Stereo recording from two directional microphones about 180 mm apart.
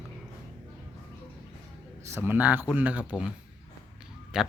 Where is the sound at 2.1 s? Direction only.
15° right (ahead or behind).